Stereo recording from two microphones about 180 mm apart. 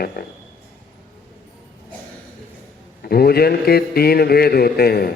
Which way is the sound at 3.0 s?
60° left (ahead or behind).